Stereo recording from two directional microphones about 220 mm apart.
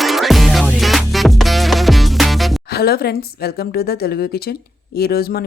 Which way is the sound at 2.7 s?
45° left (ahead or behind).